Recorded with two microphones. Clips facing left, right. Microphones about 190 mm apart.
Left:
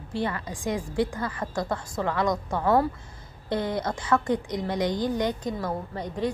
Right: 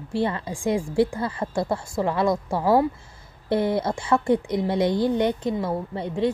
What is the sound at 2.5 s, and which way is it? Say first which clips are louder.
Speech: right 2 dB; 10° right (ahead or behind).